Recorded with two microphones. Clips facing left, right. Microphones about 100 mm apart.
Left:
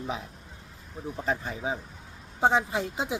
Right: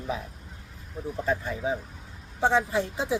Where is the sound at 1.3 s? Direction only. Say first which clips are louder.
Right 2 dB; 20° left (ahead or behind).